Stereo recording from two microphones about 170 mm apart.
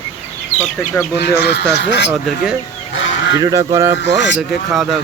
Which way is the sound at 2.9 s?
90° left.